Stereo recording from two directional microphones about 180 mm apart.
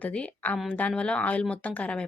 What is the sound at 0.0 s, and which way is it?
A woman's voice, 5° left (ahead or behind).